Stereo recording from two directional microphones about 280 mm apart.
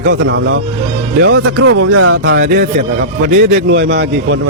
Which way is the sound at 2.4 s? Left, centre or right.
Right.